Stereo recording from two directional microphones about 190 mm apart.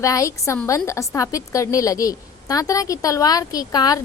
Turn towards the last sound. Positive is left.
turn(degrees=20)  # may be behind; listen again after turning